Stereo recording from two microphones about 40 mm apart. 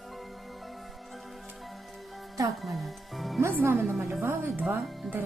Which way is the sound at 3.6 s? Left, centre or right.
Right.